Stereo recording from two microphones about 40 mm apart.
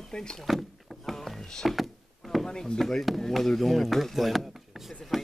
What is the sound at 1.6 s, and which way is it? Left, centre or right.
Speech, centre.